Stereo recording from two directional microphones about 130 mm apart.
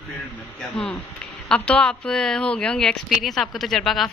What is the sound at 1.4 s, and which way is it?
Speech, 10° left (ahead or behind).